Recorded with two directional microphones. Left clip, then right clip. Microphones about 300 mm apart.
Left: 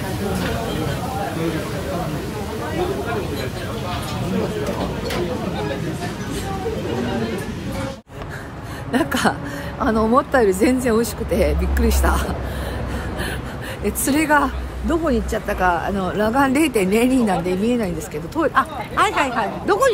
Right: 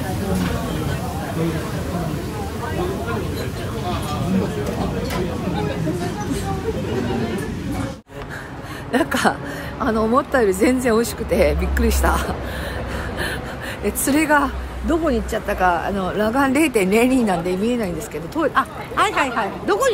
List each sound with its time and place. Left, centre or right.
8.9 s a woman's voice: centre
13.8 s a woman's voice: centre